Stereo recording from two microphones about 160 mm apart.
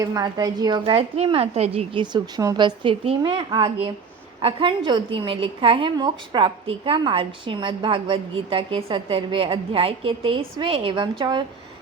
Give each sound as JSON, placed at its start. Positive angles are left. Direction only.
{"t": 0.0, "sound": "a woman's voice", "side_deg": -25}